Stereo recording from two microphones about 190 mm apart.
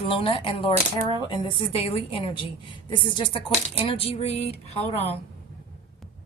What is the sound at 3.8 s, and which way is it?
A woman's voice, 30° left (ahead or behind).